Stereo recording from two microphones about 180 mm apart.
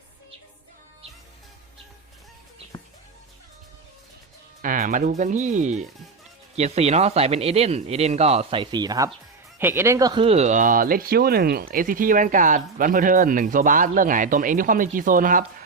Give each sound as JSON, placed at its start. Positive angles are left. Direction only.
{"t": 2.7, "sound": "music", "side_deg": 25}
{"t": 4.6, "sound": "speech", "side_deg": -50}